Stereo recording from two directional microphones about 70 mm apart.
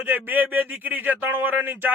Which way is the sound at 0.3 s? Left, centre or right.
Right.